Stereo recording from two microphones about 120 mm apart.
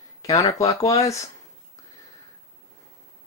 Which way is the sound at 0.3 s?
25° left (ahead or behind).